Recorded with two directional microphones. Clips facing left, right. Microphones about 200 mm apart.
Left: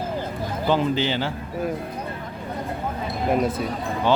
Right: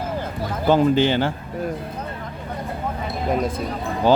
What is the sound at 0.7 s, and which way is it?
Speech, 50° right (ahead or behind).